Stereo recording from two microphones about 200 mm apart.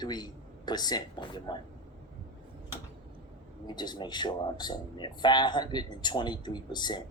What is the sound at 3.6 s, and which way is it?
Speech, 20° left (ahead or behind).